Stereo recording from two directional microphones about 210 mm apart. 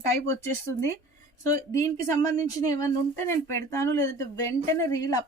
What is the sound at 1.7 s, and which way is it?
Speech, 15° left (ahead or behind).